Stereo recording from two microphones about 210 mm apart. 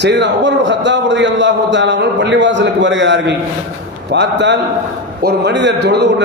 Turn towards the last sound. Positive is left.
turn(degrees=-55)  # may be behind; listen again after turning